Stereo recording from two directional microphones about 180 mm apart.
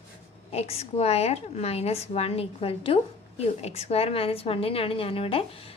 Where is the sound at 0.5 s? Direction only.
35° left (ahead or behind).